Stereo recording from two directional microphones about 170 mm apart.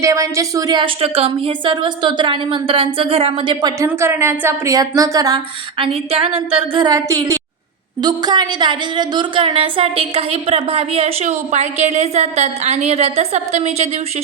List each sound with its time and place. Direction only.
0.0 s speech: 20° right (ahead or behind)
3.8 s speech: 15° right (ahead or behind)
5.8 s a woman's voice: 35° right (ahead or behind)